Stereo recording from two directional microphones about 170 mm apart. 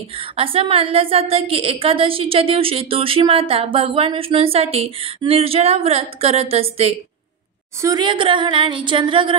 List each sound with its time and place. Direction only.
0.4 s a woman's voice: 35° right (ahead or behind)
7.8 s a woman's voice: 25° right (ahead or behind)